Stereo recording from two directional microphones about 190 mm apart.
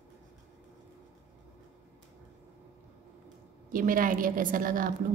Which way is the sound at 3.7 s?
45° right (ahead or behind).